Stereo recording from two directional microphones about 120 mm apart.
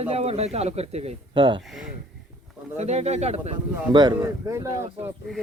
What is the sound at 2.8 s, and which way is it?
Speech, 65° right (ahead or behind).